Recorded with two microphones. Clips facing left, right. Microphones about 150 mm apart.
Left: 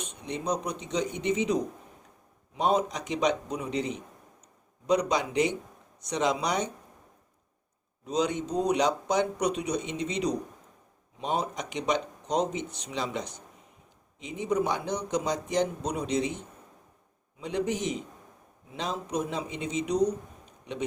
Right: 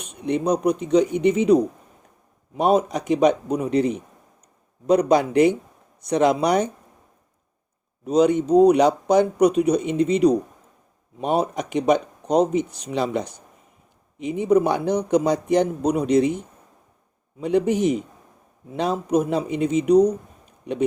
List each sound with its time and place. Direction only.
0.3 s speech: 60° right (ahead or behind)
8.0 s speech: 55° right (ahead or behind)
17.4 s speech: 55° right (ahead or behind)